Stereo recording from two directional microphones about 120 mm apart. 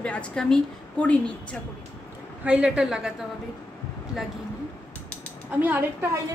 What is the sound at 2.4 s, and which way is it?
Speech, 10° right (ahead or behind).